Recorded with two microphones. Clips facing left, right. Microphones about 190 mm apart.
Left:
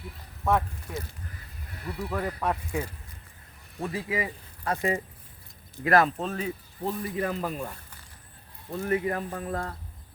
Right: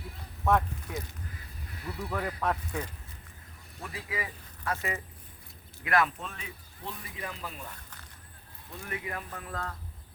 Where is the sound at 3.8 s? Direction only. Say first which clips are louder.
Left 8 dB; 30° left (ahead or behind); by 7.7 s 45° left (ahead or behind).